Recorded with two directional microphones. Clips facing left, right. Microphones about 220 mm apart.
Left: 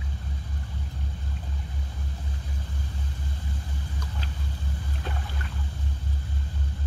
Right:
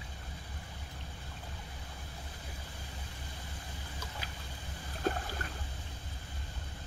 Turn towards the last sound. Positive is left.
turn(degrees=-40)  # may be behind; listen again after turning